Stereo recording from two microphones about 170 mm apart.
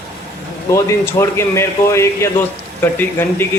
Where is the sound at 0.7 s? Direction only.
15° left (ahead or behind).